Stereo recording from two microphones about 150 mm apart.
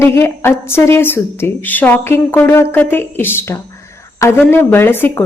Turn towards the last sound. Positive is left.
turn(degrees=15)  # may be behind; listen again after turning